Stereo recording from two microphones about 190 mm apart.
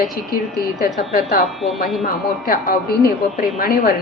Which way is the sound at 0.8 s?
50° left (ahead or behind).